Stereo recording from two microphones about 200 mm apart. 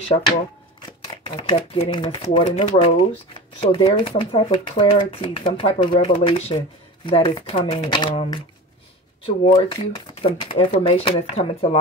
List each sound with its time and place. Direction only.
0.7 s speech: 25° left (ahead or behind)